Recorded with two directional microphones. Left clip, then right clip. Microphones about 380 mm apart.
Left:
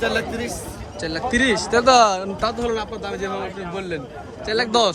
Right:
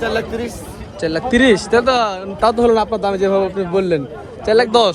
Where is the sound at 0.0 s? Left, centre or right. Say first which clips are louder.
Right 3 dB; centre.